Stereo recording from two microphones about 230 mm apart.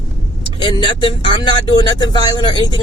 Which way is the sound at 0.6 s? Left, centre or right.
Left.